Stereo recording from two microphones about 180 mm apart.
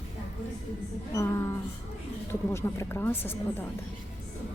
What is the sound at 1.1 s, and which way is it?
Speech, 15° left (ahead or behind).